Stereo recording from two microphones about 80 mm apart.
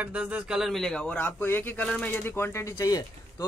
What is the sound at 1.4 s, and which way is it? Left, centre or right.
Speech, left.